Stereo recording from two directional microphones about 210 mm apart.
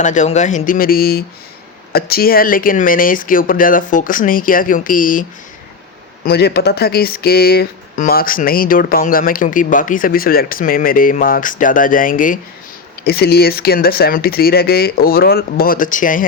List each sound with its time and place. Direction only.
0.0 s speech: 35° left (ahead or behind)
6.2 s speech: 50° left (ahead or behind)